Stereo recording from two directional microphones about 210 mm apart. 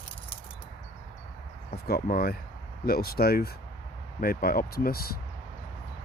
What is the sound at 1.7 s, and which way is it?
Speech, 45° left (ahead or behind).